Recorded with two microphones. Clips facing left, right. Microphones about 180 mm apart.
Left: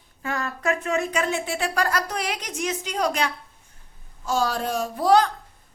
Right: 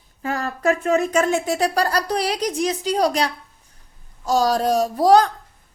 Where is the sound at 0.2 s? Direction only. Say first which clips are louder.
Right 4 dB; 35° right (ahead or behind).